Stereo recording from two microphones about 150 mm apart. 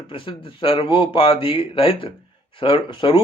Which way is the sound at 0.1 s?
35° left (ahead or behind).